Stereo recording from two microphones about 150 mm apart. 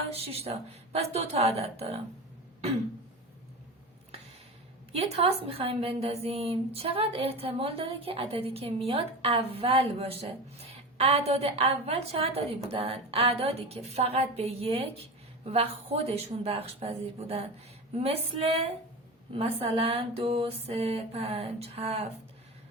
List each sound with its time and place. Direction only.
0.1 s a woman's voice: 40° right (ahead or behind)
4.9 s a woman's voice: 40° right (ahead or behind)